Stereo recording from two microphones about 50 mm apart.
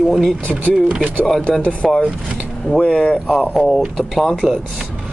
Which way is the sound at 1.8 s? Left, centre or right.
Centre.